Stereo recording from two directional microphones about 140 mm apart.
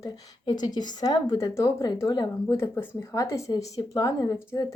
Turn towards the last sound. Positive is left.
turn(degrees=25)  # may be behind; listen again after turning